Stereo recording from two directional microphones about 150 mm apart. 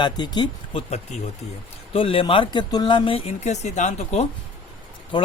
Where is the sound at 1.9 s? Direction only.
35° left (ahead or behind).